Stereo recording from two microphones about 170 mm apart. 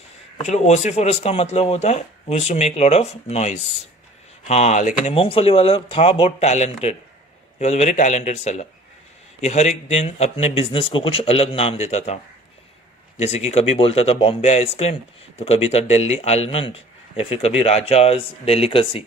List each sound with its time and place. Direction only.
0.4 s speech: 40° left (ahead or behind)